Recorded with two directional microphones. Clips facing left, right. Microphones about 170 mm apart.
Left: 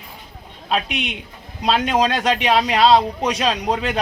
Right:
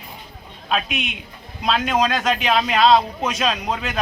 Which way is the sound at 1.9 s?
30° left (ahead or behind).